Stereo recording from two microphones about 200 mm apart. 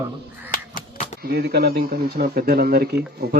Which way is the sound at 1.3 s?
55° right (ahead or behind).